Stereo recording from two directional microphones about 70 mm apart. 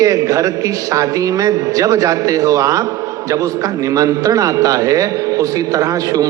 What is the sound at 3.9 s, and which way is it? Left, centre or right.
A man's voice, right.